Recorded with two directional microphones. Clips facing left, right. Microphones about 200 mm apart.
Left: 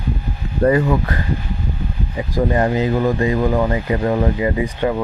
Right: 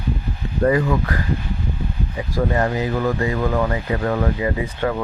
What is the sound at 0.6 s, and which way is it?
Speech, 30° left (ahead or behind).